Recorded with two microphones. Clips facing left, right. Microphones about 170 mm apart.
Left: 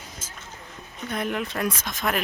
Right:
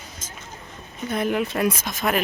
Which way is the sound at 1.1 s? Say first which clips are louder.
Right 5 dB; 5° right (ahead or behind).